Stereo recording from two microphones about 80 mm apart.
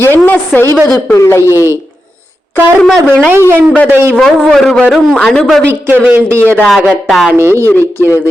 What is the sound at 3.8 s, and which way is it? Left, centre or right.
Speech, right.